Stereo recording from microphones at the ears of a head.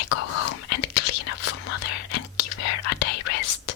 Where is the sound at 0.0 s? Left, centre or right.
Left.